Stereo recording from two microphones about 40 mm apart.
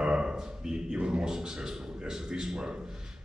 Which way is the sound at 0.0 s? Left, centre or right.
Right.